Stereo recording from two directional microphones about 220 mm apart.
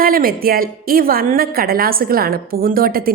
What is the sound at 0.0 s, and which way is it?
A woman's voice, 40° right (ahead or behind).